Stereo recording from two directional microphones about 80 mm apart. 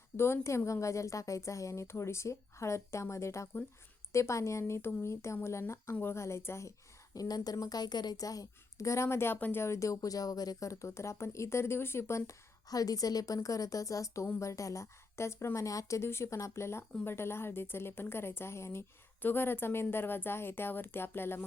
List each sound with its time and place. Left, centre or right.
0.2 s a woman's voice: left